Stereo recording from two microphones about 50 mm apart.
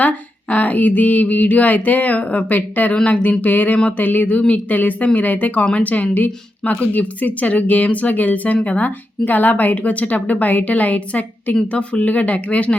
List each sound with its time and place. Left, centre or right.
0.5 s a woman's voice: left
2.9 s a woman's voice: left